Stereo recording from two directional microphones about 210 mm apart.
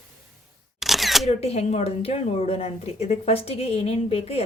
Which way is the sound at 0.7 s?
Centre (ahead or behind).